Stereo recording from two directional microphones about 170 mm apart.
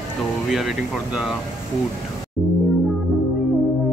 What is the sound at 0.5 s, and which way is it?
Speech, 5° right (ahead or behind).